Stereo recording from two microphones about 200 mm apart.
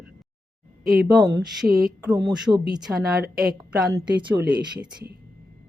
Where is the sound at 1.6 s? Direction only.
50° right (ahead or behind).